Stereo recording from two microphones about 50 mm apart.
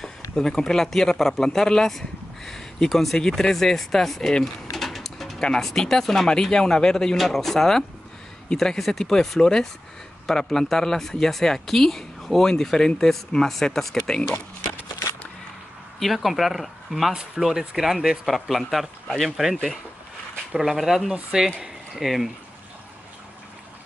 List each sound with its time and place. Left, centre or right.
0.4 s speech: centre
4.6 s pigeon: centre
5.4 s speech: centre
16.0 s speech: centre
17.1 s speech: centre
19.5 s speech: centre
20.5 s speech: centre
21.1 s speech: centre
22.0 s speech: centre